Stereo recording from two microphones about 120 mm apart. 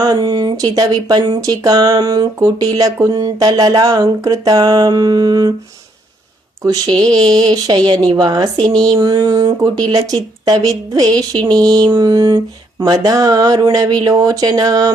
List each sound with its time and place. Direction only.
0.0 s speech: 35° right (ahead or behind)
7.0 s speech: 35° right (ahead or behind)